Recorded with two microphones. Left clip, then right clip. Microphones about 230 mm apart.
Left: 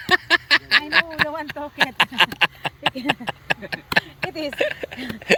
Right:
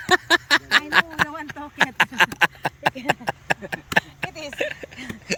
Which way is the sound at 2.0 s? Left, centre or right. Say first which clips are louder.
Even; centre.